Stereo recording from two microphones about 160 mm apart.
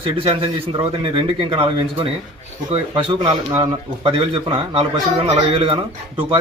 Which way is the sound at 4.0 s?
35° right (ahead or behind).